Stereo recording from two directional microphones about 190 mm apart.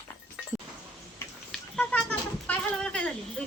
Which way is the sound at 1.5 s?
5° left (ahead or behind).